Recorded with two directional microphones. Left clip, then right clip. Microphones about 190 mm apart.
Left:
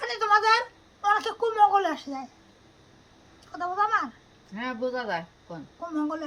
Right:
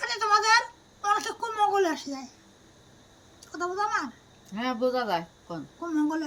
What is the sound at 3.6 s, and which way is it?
Speech, 10° left (ahead or behind).